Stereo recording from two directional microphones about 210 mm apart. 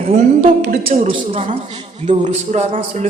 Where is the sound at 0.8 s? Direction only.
30° right (ahead or behind).